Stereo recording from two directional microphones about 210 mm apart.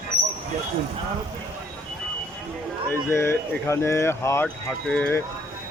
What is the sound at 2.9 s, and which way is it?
Speech, 10° left (ahead or behind).